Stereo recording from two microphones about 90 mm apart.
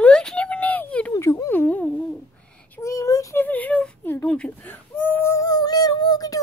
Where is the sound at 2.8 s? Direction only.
35° left (ahead or behind).